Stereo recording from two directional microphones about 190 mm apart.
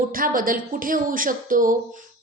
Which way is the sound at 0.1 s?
50° right (ahead or behind).